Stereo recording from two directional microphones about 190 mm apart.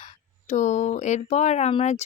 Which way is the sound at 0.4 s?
35° left (ahead or behind).